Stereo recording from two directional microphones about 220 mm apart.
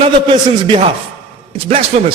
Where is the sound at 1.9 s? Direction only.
30° right (ahead or behind).